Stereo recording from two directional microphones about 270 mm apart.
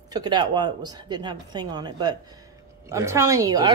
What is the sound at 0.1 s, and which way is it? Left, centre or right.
Speech, centre.